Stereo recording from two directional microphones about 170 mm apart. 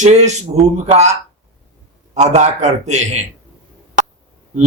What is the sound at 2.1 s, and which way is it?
A man's voice, 40° right (ahead or behind).